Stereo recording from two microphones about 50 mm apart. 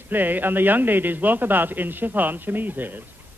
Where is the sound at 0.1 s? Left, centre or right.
Right.